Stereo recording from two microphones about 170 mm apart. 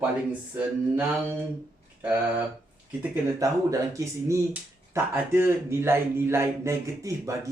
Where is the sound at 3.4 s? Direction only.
20° right (ahead or behind).